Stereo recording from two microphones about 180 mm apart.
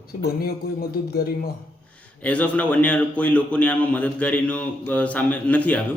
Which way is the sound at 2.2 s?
10° left (ahead or behind).